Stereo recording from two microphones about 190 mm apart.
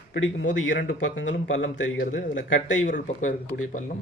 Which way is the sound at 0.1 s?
75° left (ahead or behind).